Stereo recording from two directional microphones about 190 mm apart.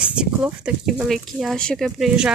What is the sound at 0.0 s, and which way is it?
Speech, 5° right (ahead or behind).